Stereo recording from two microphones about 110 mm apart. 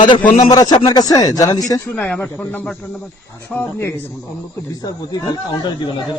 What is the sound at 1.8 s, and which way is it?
A man's voice, 15° left (ahead or behind).